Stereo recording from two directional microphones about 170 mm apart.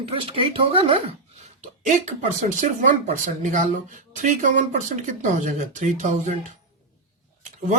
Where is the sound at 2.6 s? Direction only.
45° right (ahead or behind).